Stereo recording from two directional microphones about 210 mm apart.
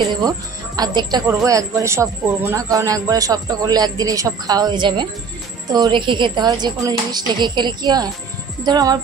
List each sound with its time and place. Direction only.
0.1 s speech: 20° right (ahead or behind)